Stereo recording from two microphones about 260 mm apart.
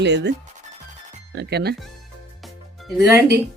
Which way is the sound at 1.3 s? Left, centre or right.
Right.